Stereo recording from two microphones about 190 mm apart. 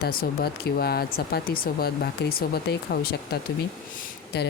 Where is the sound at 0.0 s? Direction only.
55° left (ahead or behind).